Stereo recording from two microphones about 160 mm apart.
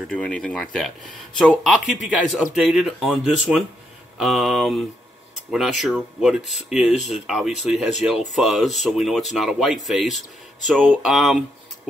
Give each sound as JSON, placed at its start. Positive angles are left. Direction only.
{"t": 0.1, "sound": "speech", "side_deg": 5}